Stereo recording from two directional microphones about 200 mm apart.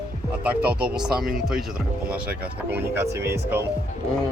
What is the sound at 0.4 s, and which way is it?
Speech, 5° right (ahead or behind).